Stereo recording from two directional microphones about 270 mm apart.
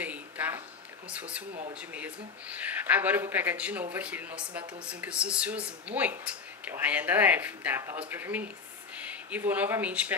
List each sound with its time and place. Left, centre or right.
0.0 s a sound: centre
1.1 s speech: centre
1.5 s speech: right
1.8 s speech: centre